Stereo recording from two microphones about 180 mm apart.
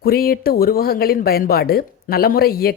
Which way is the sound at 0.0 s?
55° left (ahead or behind).